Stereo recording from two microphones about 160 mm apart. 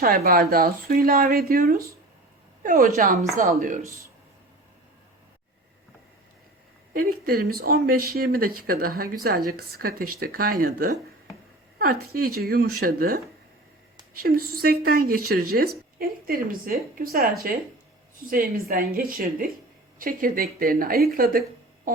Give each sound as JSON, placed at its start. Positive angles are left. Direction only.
{"t": 0.0, "sound": "speech", "side_deg": -65}
{"t": 6.9, "sound": "speech", "side_deg": -65}